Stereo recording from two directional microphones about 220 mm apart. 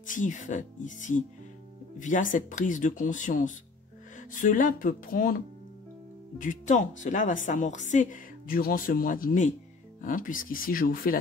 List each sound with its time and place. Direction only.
0.0 s speech: 35° left (ahead or behind)